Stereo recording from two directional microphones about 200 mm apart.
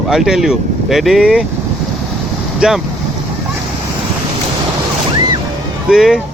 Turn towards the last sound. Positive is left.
turn(degrees=-5)  # may be behind; listen again after turning